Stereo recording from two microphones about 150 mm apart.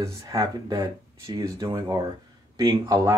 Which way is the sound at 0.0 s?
25° right (ahead or behind).